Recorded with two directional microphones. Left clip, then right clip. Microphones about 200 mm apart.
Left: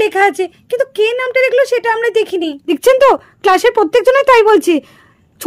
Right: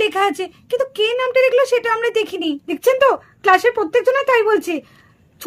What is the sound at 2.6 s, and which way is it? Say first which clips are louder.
A woman's voice: left 6 dB; 45° left (ahead or behind).